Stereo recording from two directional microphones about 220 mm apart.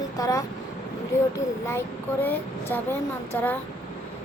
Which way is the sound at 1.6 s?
10° left (ahead or behind).